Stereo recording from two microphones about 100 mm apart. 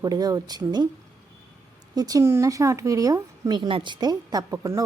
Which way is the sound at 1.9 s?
40° right (ahead or behind).